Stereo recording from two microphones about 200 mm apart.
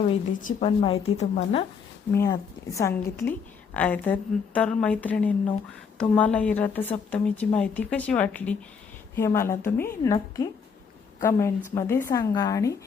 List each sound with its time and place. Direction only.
0.0 s speech: 30° left (ahead or behind)
2.1 s speech: 15° left (ahead or behind)